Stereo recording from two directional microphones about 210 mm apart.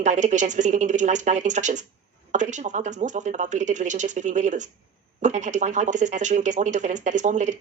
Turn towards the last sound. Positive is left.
turn(degrees=-35)  # may be behind; listen again after turning